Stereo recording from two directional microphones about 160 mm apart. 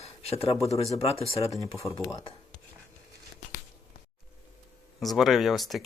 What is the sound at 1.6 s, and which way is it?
Speech, 20° left (ahead or behind).